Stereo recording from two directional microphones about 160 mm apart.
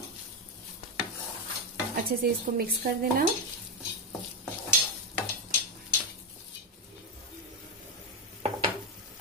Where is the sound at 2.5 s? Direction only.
55° right (ahead or behind).